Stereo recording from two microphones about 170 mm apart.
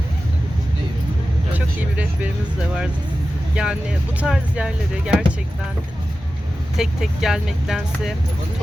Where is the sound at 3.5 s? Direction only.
5° right (ahead or behind).